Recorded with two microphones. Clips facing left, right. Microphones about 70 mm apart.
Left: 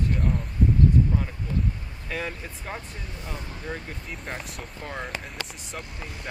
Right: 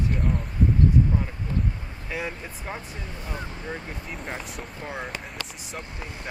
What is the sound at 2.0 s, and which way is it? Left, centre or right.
Speech, centre.